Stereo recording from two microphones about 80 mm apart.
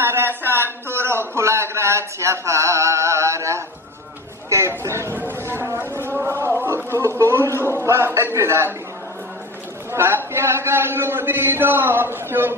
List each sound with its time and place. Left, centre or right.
0.0 s a man's voice: right
5.1 s a sound: right
6.6 s a man's voice: right
9.8 s a man's voice: right